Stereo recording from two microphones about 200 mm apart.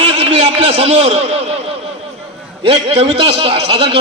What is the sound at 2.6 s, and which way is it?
A man's voice, 30° right (ahead or behind).